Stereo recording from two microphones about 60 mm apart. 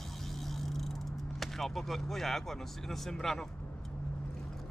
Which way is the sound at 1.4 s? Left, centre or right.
Centre.